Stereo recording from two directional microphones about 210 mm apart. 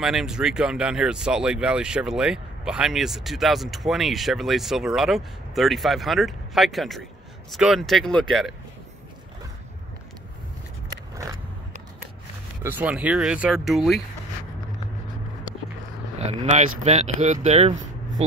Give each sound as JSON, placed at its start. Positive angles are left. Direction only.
{"t": 0.0, "sound": "speech", "side_deg": 0}
{"t": 12.6, "sound": "speech", "side_deg": -10}
{"t": 16.2, "sound": "speech", "side_deg": -30}